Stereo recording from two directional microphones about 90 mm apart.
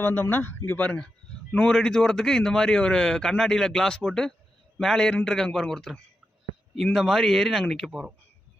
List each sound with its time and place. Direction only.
0.0 s a man's voice: 20° left (ahead or behind); by 7.9 s 5° left (ahead or behind)
7.9 s speech: 10° right (ahead or behind)